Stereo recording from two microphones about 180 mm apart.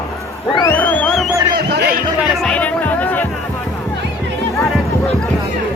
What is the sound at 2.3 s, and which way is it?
Music, 5° left (ahead or behind).